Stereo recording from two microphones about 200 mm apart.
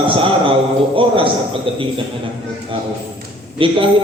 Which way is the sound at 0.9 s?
25° right (ahead or behind).